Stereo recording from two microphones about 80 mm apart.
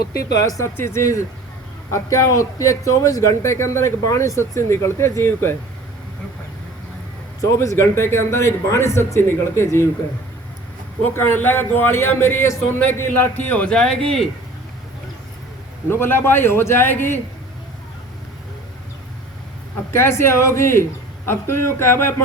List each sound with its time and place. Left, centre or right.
0.3 s a man's voice: left
7.4 s a man's voice: left
11.1 s a man's voice: left
12.9 s a man's voice: left
15.9 s a man's voice: left
19.9 s a man's voice: left